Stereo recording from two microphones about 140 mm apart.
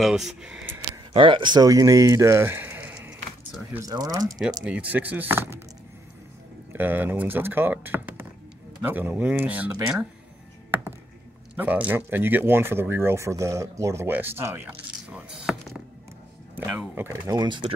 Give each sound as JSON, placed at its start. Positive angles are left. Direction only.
{"t": 0.0, "sound": "speech", "side_deg": 0}
{"t": 1.1, "sound": "speech", "side_deg": -40}
{"t": 3.8, "sound": "speech", "side_deg": -30}
{"t": 4.6, "sound": "speech", "side_deg": -10}
{"t": 6.7, "sound": "speech", "side_deg": -15}
{"t": 10.7, "sound": "computer keyboard", "side_deg": -15}
{"t": 11.5, "sound": "speech", "side_deg": -10}
{"t": 16.5, "sound": "speech", "side_deg": -15}
{"t": 17.3, "sound": "speech", "side_deg": -30}